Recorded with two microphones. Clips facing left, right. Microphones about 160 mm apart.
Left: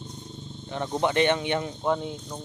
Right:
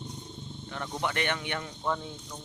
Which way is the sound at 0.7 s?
25° left (ahead or behind).